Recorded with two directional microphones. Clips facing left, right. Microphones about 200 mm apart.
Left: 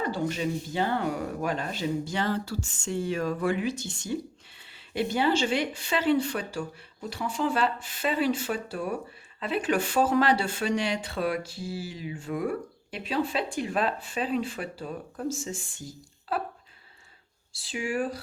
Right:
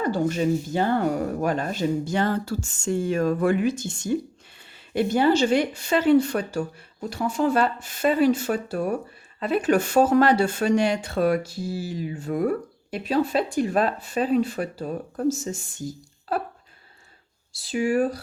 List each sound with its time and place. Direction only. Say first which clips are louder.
0.0 s speech: right 6 dB; 45° right (ahead or behind)
17.5 s speech: right 8 dB; 40° right (ahead or behind)